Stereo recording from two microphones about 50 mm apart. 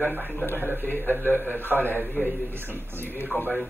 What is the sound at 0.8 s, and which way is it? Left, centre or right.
Speech, left.